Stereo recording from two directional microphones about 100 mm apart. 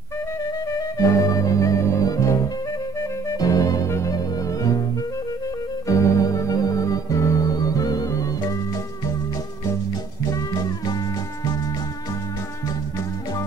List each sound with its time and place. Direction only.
0.9 s music: 35° left (ahead or behind)
5.9 s organ: 30° left (ahead or behind)
10.3 s music: 40° left (ahead or behind)